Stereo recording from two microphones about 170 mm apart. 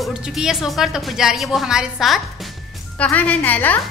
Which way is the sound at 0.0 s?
Centre (ahead or behind).